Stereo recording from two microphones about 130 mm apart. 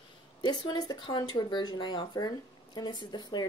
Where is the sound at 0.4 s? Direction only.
35° left (ahead or behind).